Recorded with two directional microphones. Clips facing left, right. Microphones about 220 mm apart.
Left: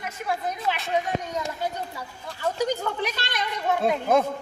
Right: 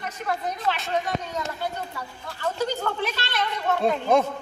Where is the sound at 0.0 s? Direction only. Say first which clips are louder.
Even; 10° left (ahead or behind).